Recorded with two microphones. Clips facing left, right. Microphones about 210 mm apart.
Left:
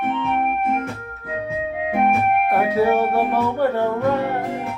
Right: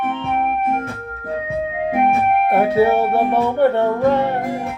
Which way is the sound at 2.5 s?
25° right (ahead or behind).